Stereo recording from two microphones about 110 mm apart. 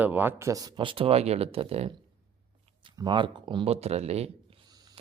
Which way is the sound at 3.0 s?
45° right (ahead or behind).